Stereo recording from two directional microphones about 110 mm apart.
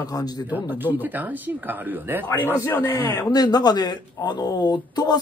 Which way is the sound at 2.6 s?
25° left (ahead or behind).